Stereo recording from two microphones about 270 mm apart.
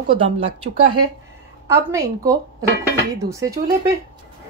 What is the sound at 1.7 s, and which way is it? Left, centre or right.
Speech, centre.